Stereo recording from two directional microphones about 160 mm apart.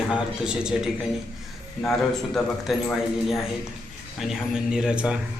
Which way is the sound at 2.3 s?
Centre (ahead or behind).